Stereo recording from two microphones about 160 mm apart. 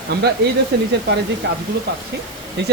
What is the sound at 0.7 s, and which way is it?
Speech, 90° right.